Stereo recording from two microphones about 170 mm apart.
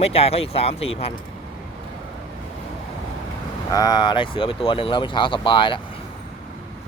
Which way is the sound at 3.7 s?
25° left (ahead or behind).